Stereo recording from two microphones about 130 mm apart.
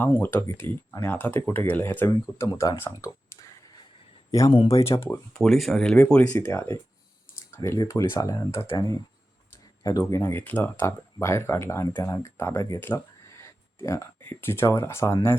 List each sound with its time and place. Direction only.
0.2 s speech: 15° left (ahead or behind)
2.0 s speech: 25° left (ahead or behind)
5.3 s speech: centre (ahead or behind); by 9.0 s 25° left (ahead or behind)
10.0 s speech: 15° left (ahead or behind)